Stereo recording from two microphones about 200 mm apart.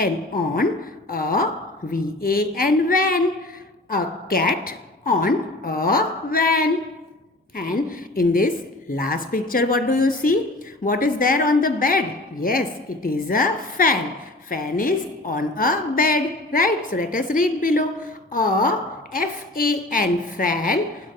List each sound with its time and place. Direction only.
0.0 s a woman's voice: 45° left (ahead or behind)
1.1 s a sound: 45° left (ahead or behind)
1.9 s a woman's voice: 45° left (ahead or behind)